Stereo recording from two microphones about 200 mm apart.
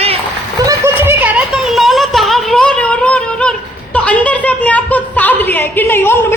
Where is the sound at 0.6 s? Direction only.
15° right (ahead or behind).